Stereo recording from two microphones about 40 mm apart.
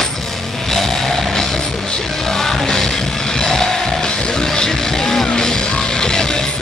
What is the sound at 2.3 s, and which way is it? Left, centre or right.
Music, centre.